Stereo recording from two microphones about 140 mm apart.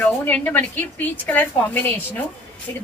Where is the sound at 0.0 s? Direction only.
10° left (ahead or behind).